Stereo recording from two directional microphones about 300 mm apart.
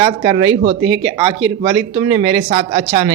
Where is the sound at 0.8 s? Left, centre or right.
Right.